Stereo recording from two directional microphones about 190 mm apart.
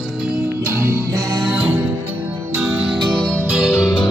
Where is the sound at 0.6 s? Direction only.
15° right (ahead or behind).